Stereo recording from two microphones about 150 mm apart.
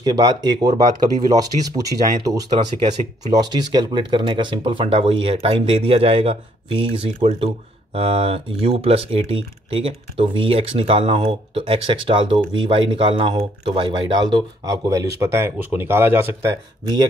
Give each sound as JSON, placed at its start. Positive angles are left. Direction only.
{"t": 0.0, "sound": "speech", "side_deg": -30}
{"t": 14.9, "sound": "speech", "side_deg": -20}